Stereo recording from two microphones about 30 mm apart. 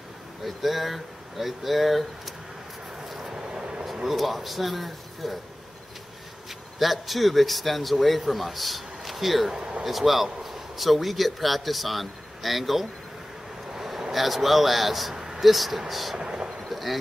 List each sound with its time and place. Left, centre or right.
0.5 s speech: centre
3.1 s vehicle: centre
3.3 s vehicle: right
4.1 s speech: centre
6.8 s speech: centre
9.5 s speech: right
9.8 s a man's voice: centre
13.7 s a sound: centre
14.1 s speech: centre
16.2 s thunder: right
16.6 s a sound: centre